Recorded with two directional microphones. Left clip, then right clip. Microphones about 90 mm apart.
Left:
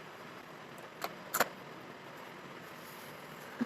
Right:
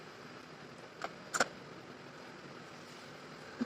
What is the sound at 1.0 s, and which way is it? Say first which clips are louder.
Vehicle: left 1 dB; 30° left (ahead or behind).